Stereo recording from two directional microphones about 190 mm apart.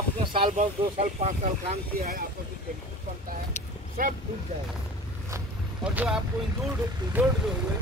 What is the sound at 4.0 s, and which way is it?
Speech, 50° right (ahead or behind).